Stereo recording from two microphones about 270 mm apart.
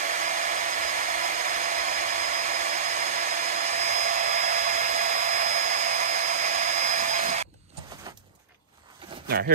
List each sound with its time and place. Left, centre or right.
0.0 s hair dryer: right